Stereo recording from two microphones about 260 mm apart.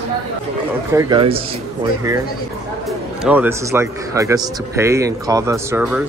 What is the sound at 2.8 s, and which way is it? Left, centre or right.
Speech, centre.